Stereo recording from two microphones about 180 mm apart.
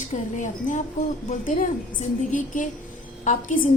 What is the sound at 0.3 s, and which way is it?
A woman's voice, 45° left (ahead or behind).